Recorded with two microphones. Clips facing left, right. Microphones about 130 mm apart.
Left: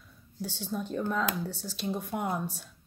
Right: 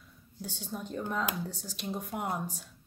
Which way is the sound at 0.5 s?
15° right (ahead or behind).